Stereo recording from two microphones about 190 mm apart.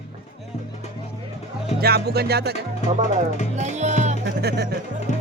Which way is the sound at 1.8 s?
55° right (ahead or behind).